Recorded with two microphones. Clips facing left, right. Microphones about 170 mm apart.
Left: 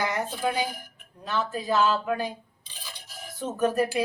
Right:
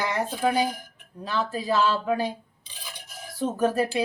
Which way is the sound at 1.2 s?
35° right (ahead or behind).